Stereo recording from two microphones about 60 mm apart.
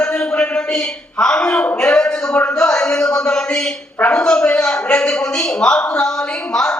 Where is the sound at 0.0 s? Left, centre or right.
Centre.